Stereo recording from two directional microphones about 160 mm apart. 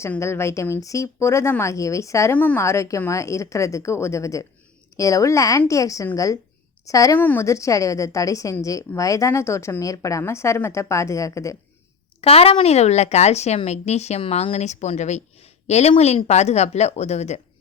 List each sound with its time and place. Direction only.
0.0 s a woman's voice: 15° left (ahead or behind)
12.2 s speech: 40° left (ahead or behind)